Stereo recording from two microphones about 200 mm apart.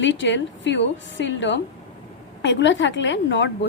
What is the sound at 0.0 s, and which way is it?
A woman's voice, 65° left (ahead or behind).